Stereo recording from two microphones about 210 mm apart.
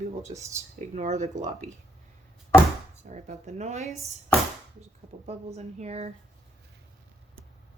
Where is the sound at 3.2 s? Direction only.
35° right (ahead or behind).